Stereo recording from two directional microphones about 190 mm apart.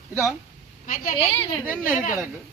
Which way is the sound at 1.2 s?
30° left (ahead or behind).